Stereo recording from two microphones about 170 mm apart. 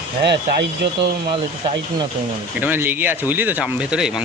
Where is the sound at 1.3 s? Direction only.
30° right (ahead or behind).